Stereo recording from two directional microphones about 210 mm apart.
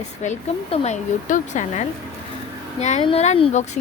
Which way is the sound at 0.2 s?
30° left (ahead or behind).